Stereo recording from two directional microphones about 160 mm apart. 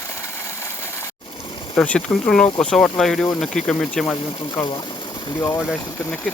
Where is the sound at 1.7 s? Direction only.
5° left (ahead or behind).